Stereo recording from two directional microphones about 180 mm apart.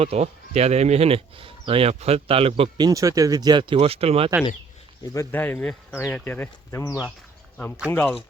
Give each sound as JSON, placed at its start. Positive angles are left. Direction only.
{"t": 0.0, "sound": "speech", "side_deg": -35}
{"t": 5.1, "sound": "speech", "side_deg": 15}